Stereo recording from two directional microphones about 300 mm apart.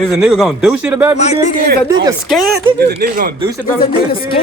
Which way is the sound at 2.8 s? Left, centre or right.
Right.